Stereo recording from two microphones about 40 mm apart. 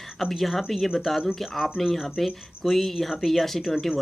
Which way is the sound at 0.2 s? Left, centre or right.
Centre.